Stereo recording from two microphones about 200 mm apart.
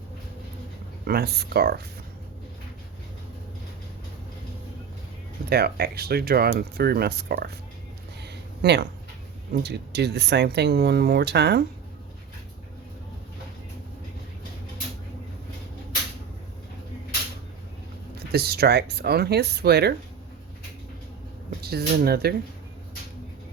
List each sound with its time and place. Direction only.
1.0 s speech: 50° right (ahead or behind)
5.5 s speech: 50° right (ahead or behind)
8.2 s a sound: 55° right (ahead or behind)
9.5 s speech: 55° right (ahead or behind)
18.3 s speech: 50° right (ahead or behind)
21.6 s speech: 50° right (ahead or behind)